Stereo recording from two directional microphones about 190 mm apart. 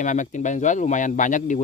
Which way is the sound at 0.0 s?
40° left (ahead or behind).